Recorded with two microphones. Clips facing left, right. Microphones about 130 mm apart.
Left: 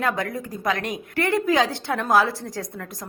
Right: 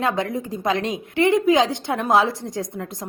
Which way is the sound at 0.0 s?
25° right (ahead or behind).